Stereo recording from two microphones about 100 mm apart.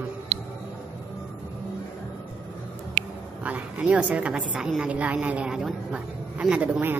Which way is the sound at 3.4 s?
15° right (ahead or behind).